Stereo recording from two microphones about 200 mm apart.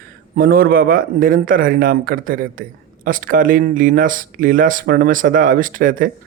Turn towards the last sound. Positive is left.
turn(degrees=-45)  # may be behind; listen again after turning